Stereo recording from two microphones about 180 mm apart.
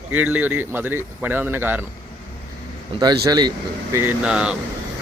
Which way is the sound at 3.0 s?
25° right (ahead or behind).